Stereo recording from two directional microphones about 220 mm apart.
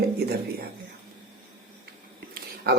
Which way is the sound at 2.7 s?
45° right (ahead or behind).